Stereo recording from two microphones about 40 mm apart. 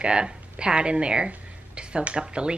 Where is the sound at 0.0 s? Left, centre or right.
Right.